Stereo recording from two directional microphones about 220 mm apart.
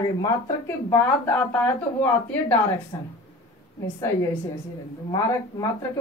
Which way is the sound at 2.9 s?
15° left (ahead or behind).